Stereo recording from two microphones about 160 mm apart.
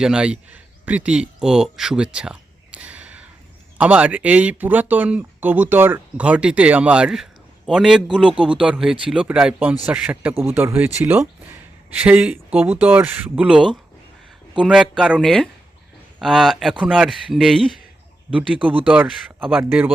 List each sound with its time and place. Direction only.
0.0 s a man's voice: 5° right (ahead or behind)
8.3 s speech: 35° right (ahead or behind)
8.5 s a man's voice: 5° right (ahead or behind)